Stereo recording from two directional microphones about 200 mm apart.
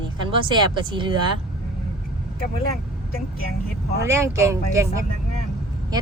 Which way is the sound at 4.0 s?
15° right (ahead or behind).